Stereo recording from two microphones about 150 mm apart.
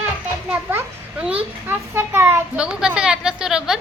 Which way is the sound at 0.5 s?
15° right (ahead or behind).